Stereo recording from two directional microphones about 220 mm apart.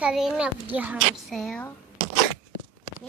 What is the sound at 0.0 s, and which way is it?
A child's voice, 5° right (ahead or behind).